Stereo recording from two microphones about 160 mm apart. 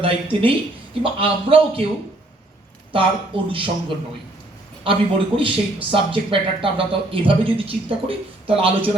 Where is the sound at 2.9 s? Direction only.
35° right (ahead or behind).